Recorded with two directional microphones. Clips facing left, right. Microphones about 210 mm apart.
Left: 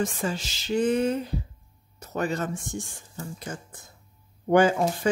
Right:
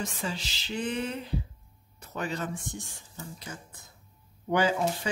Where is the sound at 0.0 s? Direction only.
50° left (ahead or behind).